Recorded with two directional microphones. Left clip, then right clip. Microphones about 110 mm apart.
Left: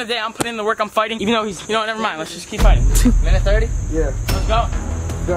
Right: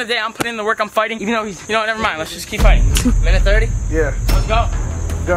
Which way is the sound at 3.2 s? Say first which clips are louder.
Right 2 dB; 15° right (ahead or behind).